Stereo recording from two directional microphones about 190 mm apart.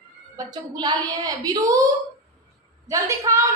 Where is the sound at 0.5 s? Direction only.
20° right (ahead or behind).